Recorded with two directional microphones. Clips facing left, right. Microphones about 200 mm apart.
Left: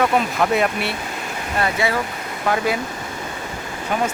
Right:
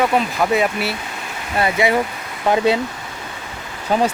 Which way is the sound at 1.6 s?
20° right (ahead or behind).